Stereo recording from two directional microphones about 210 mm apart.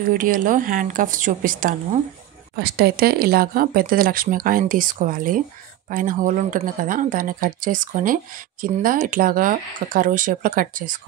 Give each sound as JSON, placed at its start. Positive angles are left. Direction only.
{"t": 0.1, "sound": "speech", "side_deg": -40}